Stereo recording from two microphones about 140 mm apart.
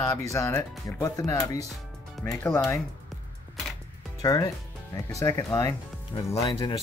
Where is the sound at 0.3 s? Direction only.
20° left (ahead or behind).